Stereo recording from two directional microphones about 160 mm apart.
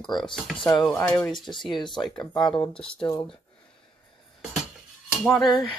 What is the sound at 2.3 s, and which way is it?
Speech, 30° left (ahead or behind).